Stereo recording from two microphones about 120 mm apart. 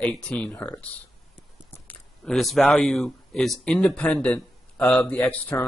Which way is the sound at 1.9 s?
5° left (ahead or behind).